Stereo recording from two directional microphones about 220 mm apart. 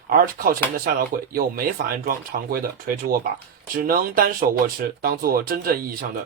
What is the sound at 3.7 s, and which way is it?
Speech, 40° right (ahead or behind).